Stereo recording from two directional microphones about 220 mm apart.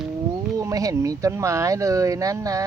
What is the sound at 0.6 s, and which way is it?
Speech, 15° right (ahead or behind).